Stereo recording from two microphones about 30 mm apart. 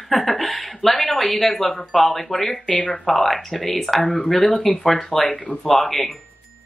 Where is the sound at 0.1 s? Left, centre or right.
Centre.